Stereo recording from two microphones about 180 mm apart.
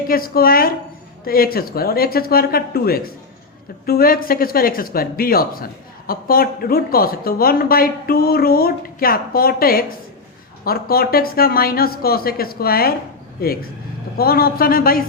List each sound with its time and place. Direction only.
0.1 s speech: 55° left (ahead or behind)